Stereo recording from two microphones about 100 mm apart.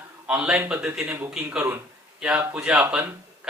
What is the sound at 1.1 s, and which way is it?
A man's voice, 20° right (ahead or behind).